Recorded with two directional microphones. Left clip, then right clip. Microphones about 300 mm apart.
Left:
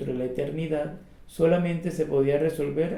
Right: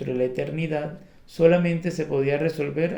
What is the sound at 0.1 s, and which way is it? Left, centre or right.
Speech, right.